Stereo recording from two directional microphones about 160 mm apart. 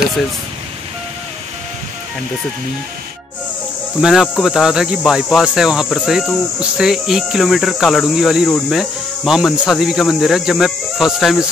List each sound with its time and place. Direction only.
4.0 s speech: centre (ahead or behind)